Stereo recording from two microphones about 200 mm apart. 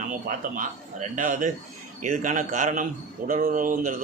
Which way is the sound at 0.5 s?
40° right (ahead or behind).